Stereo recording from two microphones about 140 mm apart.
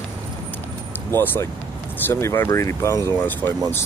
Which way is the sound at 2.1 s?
15° left (ahead or behind).